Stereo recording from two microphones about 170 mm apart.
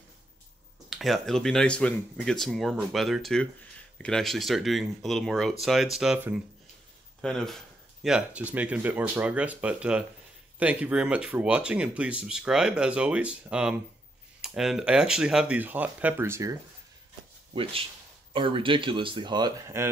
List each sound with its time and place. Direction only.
0.8 s speech: centre (ahead or behind); by 16.5 s 15° right (ahead or behind)
18.3 s speech: 30° right (ahead or behind)